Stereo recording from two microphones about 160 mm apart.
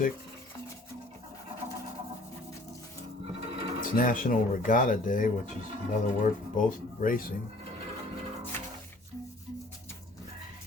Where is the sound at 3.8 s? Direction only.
60° left (ahead or behind).